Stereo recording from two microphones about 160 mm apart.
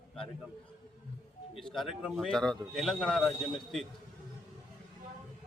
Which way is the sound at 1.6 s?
Centre (ahead or behind).